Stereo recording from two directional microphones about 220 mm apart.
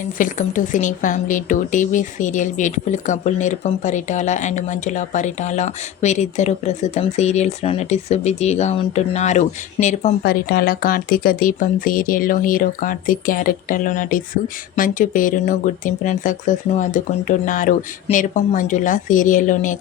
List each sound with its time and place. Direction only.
0.0 s speech: 35° left (ahead or behind)
10.2 s speech: 45° left (ahead or behind)